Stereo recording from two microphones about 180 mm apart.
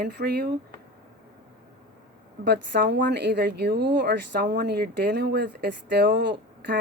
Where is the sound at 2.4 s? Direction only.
65° right (ahead or behind).